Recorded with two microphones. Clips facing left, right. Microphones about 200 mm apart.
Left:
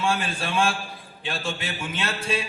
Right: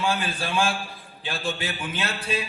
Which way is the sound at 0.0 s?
30° left (ahead or behind).